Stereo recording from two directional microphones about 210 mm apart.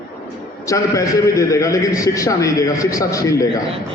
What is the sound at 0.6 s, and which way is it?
A man's voice, 15° left (ahead or behind).